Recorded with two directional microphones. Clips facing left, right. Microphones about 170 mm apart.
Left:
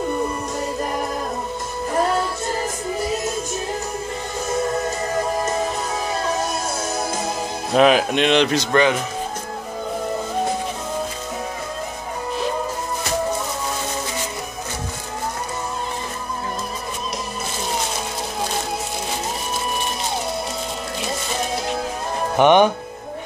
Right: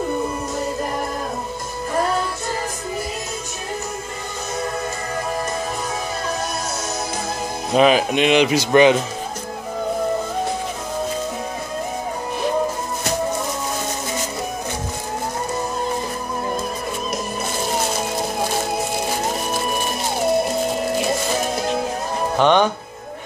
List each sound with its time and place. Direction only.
7.7 s speech: centre (ahead or behind)
22.4 s speech: 15° left (ahead or behind)